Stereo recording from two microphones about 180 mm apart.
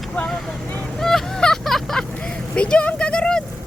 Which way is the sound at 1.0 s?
5° left (ahead or behind).